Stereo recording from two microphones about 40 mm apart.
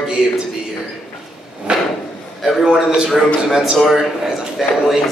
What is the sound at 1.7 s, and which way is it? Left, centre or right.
Drawer open or close, right.